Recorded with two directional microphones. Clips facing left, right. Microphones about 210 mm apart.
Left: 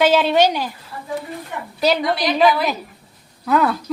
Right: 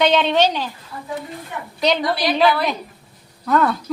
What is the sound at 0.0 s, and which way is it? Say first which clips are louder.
Speech: left 2 dB; 5° left (ahead or behind).